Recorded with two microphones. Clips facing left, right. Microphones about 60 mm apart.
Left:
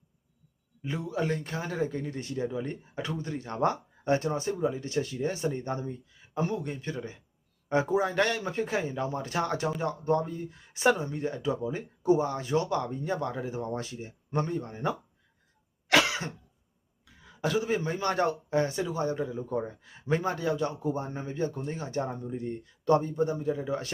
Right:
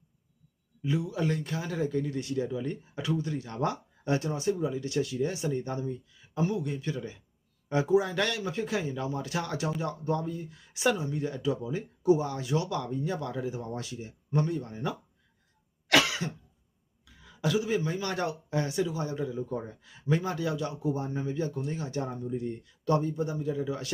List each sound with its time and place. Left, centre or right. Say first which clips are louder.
0.8 s a man's voice: right 1 dB; left
16.2 s cough: right 2 dB; left
17.4 s a man's voice: even; left